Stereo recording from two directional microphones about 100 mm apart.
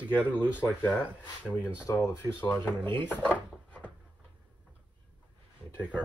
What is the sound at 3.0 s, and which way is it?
Drawer open or close, 20° left (ahead or behind).